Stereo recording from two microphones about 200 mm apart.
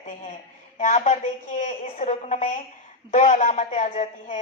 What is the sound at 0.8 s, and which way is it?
A man's voice, 35° left (ahead or behind).